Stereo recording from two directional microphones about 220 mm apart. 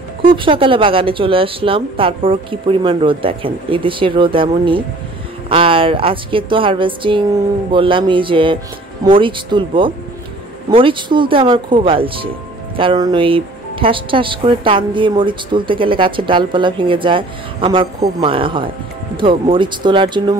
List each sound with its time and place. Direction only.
0.2 s speech: 25° right (ahead or behind)